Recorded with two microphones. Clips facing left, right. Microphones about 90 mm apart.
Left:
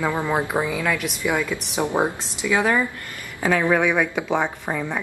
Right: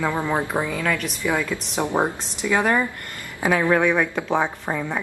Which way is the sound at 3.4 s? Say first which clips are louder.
Even; 5° right (ahead or behind).